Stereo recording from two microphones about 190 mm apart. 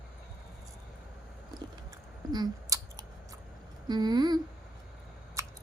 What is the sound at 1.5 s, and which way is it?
Chewing, 20° right (ahead or behind).